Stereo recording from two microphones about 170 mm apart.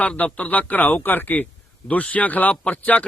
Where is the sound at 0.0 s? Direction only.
5° left (ahead or behind).